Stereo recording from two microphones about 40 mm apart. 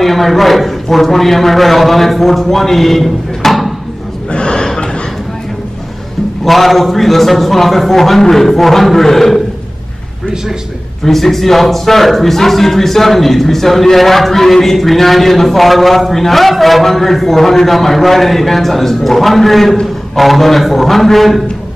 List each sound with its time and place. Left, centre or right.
0.0 s a man's voice: centre
4.3 s gasp: left
6.4 s a man's voice: centre
11.1 s a man's voice: centre